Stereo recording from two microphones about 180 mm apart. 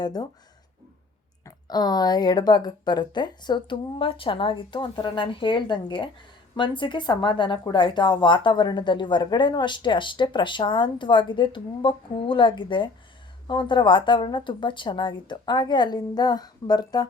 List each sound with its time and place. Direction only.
0.0 s speech: 20° left (ahead or behind)
1.5 s speech: 20° left (ahead or behind)